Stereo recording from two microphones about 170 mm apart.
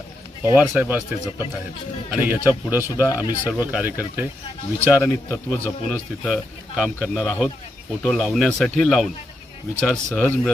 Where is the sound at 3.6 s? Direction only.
10° right (ahead or behind).